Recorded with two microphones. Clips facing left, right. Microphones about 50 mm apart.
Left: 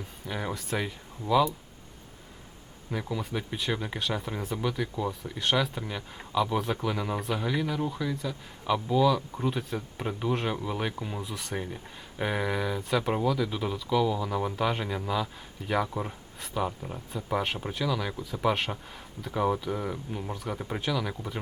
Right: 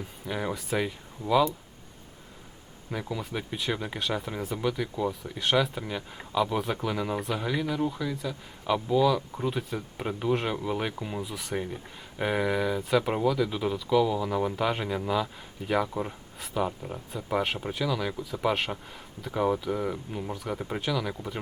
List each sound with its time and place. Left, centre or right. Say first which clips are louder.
0.3 s speech: right 2 dB; centre
2.9 s speech: left 1 dB; centre